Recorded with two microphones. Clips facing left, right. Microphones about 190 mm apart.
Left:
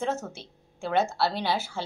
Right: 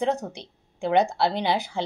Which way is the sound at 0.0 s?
15° right (ahead or behind).